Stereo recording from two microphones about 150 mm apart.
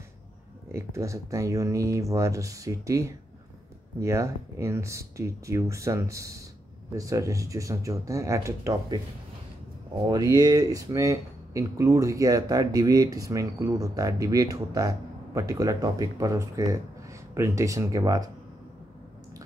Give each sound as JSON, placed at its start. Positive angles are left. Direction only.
{"t": 0.7, "sound": "speech", "side_deg": -20}
{"t": 10.0, "sound": "speech", "side_deg": -25}